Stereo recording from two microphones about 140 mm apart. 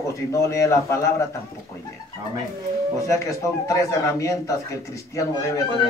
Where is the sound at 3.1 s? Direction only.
20° left (ahead or behind).